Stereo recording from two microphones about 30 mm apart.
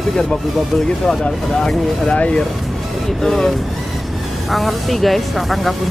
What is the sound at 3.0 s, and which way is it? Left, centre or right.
Speech, centre.